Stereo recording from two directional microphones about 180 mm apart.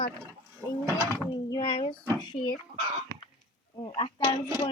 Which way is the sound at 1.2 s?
20° left (ahead or behind).